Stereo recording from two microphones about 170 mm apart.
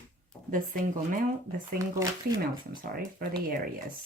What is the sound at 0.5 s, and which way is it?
Speech, 55° right (ahead or behind).